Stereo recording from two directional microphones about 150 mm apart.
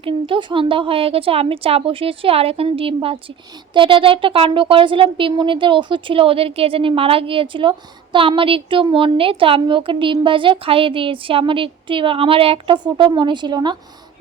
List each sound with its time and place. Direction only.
0.0 s speech: 35° right (ahead or behind)